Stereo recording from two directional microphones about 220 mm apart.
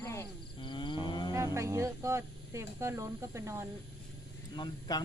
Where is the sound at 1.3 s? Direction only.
15° right (ahead or behind).